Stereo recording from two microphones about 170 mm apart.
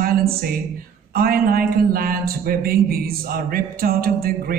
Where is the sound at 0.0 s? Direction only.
60° right (ahead or behind).